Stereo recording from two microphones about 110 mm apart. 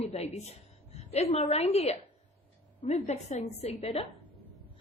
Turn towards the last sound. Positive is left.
turn(degrees=60)  # may be behind; listen again after turning